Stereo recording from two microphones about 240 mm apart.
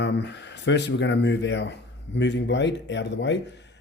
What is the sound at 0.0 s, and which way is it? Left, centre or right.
Speech, left.